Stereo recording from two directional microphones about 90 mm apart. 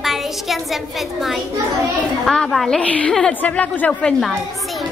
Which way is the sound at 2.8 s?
15° left (ahead or behind).